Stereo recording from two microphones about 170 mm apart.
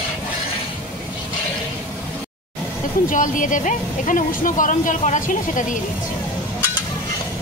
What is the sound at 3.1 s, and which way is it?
Speech, 50° left (ahead or behind).